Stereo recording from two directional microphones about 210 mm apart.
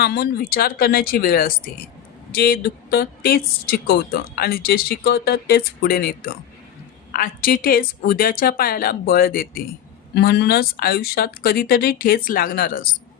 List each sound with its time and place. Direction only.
0.0 s speech: 45° left (ahead or behind)